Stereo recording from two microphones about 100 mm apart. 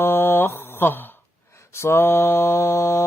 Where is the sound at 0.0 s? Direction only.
25° left (ahead or behind).